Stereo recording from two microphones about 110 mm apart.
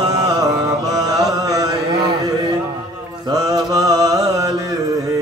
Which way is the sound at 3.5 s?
35° right (ahead or behind).